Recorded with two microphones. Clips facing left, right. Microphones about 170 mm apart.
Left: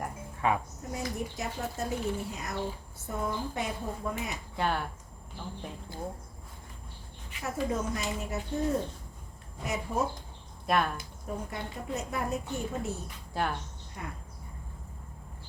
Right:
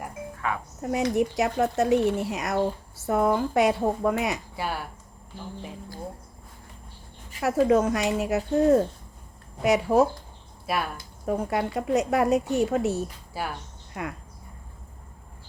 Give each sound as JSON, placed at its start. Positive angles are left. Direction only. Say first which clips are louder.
{"t": 0.4, "sound": "speech", "louder": "left 2 dB", "side_deg": 20}
{"t": 0.8, "sound": "speech", "louder": "right 11 dB", "side_deg": -75}
{"t": 4.5, "sound": "speech", "louder": "left 1 dB", "side_deg": -5}
{"t": 7.4, "sound": "speech", "louder": "right 11 dB", "side_deg": -80}
{"t": 10.7, "sound": "speech", "louder": "left 1 dB", "side_deg": -5}
{"t": 11.3, "sound": "speech", "louder": "right 11 dB", "side_deg": -80}
{"t": 13.3, "sound": "speech", "louder": "left 1 dB", "side_deg": -5}
{"t": 14.0, "sound": "speech", "louder": "right 8 dB", "side_deg": -90}